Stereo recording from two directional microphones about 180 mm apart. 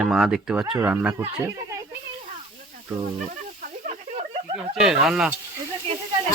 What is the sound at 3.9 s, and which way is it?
Snake, 35° right (ahead or behind).